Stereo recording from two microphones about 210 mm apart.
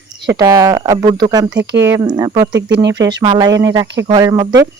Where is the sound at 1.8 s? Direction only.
15° right (ahead or behind).